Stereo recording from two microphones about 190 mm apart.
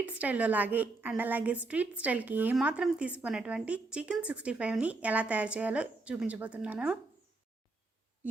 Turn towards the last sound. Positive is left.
turn(degrees=-5)  # may be behind; listen again after turning